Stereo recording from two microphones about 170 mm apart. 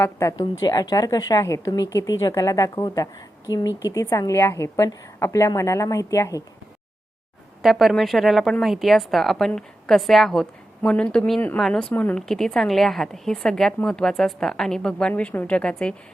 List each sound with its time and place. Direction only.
0.0 s a woman's voice: 20° left (ahead or behind)
7.6 s a woman's voice: centre (ahead or behind)